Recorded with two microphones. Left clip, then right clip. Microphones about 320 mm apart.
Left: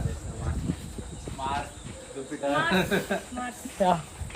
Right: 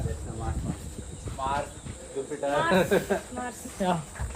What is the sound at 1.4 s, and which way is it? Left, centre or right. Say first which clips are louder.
Cricket: right 2 dB; right.